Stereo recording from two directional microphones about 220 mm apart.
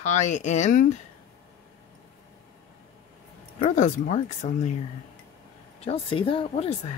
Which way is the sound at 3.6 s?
35° left (ahead or behind).